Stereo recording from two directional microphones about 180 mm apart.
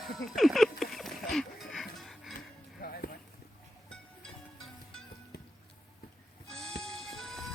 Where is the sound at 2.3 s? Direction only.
55° left (ahead or behind).